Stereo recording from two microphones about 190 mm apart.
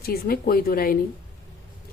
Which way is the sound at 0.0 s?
55° left (ahead or behind).